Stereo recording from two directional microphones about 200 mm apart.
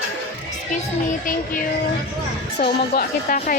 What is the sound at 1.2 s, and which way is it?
Music, 40° left (ahead or behind).